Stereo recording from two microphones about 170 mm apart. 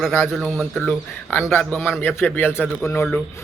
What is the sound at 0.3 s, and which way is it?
A man's voice, centre (ahead or behind).